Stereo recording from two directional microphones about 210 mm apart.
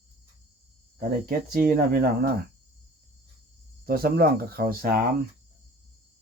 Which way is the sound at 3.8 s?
45° right (ahead or behind).